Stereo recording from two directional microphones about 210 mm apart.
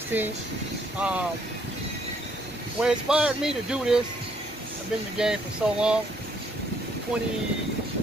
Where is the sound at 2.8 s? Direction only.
5° right (ahead or behind).